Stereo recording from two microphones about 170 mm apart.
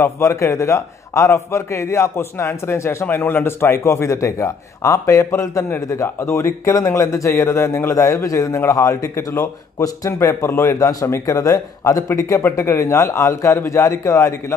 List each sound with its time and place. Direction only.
0.0 s a man's voice: 15° left (ahead or behind)